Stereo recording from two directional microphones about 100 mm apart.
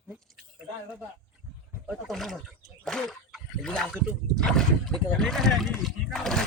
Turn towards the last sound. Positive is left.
turn(degrees=5)  # may be behind; listen again after turning